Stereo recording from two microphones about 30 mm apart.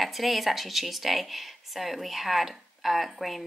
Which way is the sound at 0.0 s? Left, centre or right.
Centre.